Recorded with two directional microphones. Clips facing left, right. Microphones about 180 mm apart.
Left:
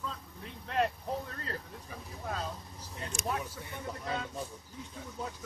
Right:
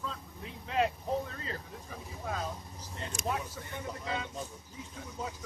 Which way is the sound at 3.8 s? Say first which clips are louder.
Left 1 dB; centre (ahead or behind).